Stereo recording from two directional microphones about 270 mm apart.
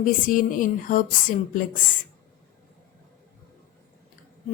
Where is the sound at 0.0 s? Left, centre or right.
Left.